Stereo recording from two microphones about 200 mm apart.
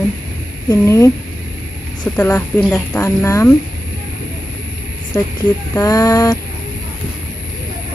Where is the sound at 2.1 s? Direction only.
10° left (ahead or behind).